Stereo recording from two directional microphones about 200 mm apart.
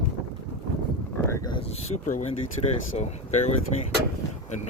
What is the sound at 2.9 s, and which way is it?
Speech, 35° left (ahead or behind).